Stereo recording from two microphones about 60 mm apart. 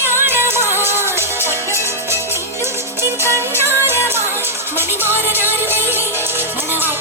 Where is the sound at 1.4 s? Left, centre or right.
Left.